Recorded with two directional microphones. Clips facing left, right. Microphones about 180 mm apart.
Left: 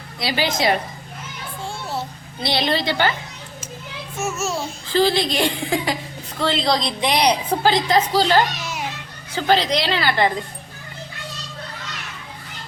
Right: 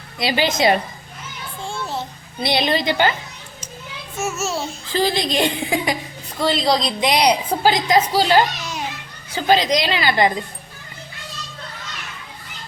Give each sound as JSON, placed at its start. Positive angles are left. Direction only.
{"t": 0.2, "sound": "a woman's voice", "side_deg": -20}
{"t": 1.6, "sound": "a sound", "side_deg": 10}
{"t": 2.4, "sound": "a woman's voice", "side_deg": -15}
{"t": 4.2, "sound": "a child's voice", "side_deg": -5}
{"t": 4.9, "sound": "a woman's voice", "side_deg": -15}